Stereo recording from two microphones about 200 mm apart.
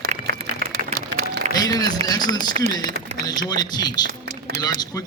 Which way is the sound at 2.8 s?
35° right (ahead or behind).